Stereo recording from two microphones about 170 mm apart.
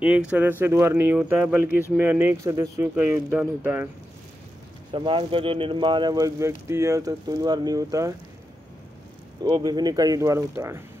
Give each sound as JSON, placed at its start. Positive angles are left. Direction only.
{"t": 0.0, "sound": "speech", "side_deg": -5}
{"t": 4.9, "sound": "speech", "side_deg": -30}
{"t": 9.4, "sound": "speech", "side_deg": -25}